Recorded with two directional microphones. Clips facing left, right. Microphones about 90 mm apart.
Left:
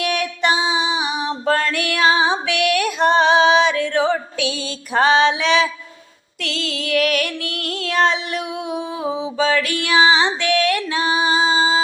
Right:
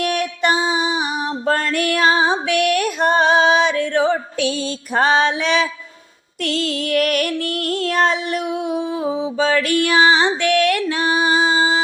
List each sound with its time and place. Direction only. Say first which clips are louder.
0.0 s music: right 1 dB; 45° right (ahead or behind)
1.7 s female singing: right 1 dB; 40° right (ahead or behind)
6.4 s music: right 4 dB; 40° right (ahead or behind)